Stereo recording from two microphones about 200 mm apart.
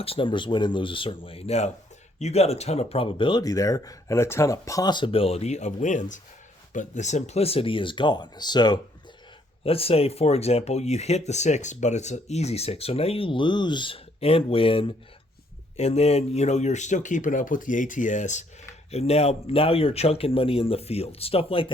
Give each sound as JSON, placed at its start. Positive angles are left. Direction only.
{"t": 0.0, "sound": "speech", "side_deg": 25}